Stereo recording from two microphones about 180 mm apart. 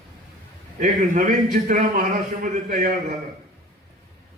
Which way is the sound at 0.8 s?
45° right (ahead or behind).